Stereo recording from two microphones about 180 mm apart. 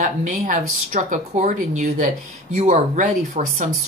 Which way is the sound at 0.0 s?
45° right (ahead or behind).